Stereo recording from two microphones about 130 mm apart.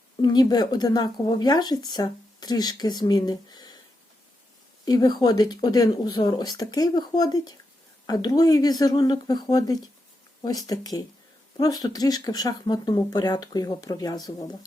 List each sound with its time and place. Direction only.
0.2 s speech: 30° left (ahead or behind)
4.9 s speech: 30° left (ahead or behind)